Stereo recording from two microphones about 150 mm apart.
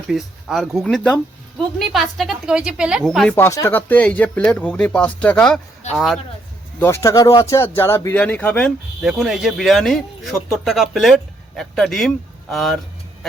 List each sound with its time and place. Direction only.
0.1 s speech: centre (ahead or behind)
3.3 s speech: 20° left (ahead or behind); by 6.1 s centre (ahead or behind)
6.7 s speech: 15° left (ahead or behind)
9.0 s speech: centre (ahead or behind)